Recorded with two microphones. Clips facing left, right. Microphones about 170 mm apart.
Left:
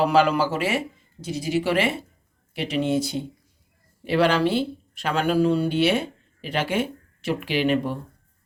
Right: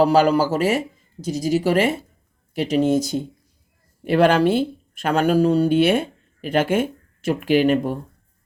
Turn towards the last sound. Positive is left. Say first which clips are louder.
# right 5 dB
turn(degrees=-45)  # may be behind; listen again after turning